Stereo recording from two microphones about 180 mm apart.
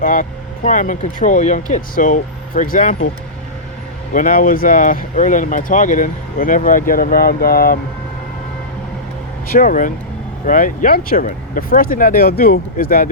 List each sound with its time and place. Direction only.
0.0 s speech: 45° left (ahead or behind)
4.1 s speech: 50° left (ahead or behind)
9.5 s speech: 50° left (ahead or behind)